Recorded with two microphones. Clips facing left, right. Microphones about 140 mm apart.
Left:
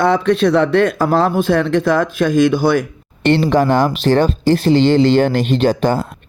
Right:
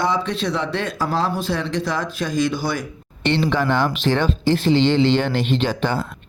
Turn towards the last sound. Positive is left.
turn(degrees=40)  # may be behind; listen again after turning